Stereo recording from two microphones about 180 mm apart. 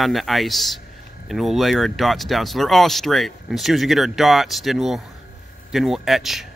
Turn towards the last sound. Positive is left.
turn(degrees=0)  # may be behind; listen again after turning